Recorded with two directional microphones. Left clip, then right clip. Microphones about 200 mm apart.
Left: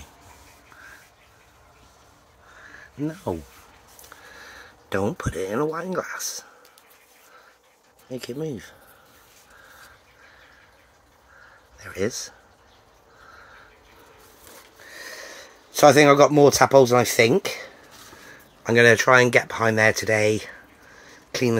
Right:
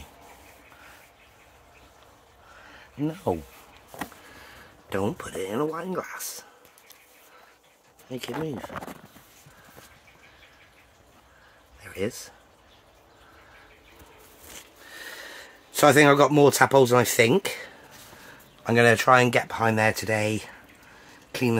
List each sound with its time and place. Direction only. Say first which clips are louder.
3.3 s speech: right 3 dB; 5° right (ahead or behind)
4.4 s speech: left 4 dB; 10° left (ahead or behind)
8.1 s speech: left 1 dB; 10° left (ahead or behind)
11.8 s speech: left 4 dB; 15° left (ahead or behind)
14.9 s a sound: left 2 dB; centre (ahead or behind)
16.3 s speech: left 3 dB; centre (ahead or behind)
21.3 s a sound: left 3 dB; 10° left (ahead or behind)